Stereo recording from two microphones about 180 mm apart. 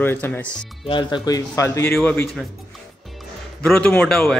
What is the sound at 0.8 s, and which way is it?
Speech, 25° left (ahead or behind).